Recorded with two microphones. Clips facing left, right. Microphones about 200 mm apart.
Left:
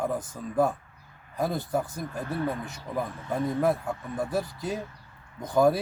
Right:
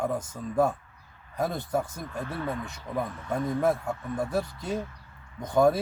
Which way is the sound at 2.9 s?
5° left (ahead or behind).